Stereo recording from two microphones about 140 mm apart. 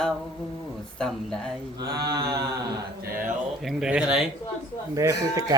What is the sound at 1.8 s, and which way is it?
Speech, 25° right (ahead or behind).